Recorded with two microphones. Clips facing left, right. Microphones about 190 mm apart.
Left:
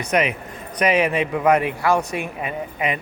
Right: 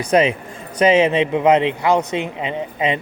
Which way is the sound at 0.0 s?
30° right (ahead or behind).